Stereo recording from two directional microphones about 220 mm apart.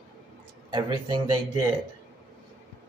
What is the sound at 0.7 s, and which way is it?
Speech, 20° right (ahead or behind).